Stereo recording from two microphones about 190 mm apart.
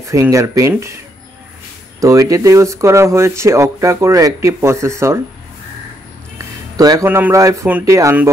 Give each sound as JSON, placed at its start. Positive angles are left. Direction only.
{"t": 0.0, "sound": "speech", "side_deg": -15}
{"t": 2.0, "sound": "speech", "side_deg": -15}
{"t": 6.3, "sound": "speech", "side_deg": -20}